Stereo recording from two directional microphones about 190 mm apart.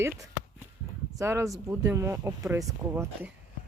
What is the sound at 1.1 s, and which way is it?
Speech, 15° right (ahead or behind).